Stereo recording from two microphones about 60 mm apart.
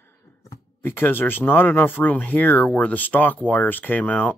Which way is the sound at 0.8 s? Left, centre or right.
Left.